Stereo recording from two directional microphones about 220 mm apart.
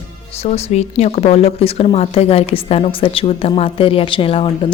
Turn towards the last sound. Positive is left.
turn(degrees=25)  # may be behind; listen again after turning